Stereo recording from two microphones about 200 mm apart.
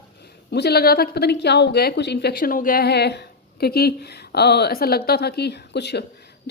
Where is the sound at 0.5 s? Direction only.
55° left (ahead or behind).